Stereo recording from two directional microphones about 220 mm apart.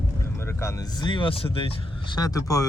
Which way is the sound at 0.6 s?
15° left (ahead or behind).